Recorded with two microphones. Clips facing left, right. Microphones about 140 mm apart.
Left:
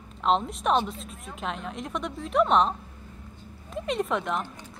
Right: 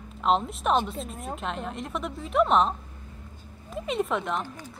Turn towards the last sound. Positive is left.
turn(degrees=0)  # may be behind; listen again after turning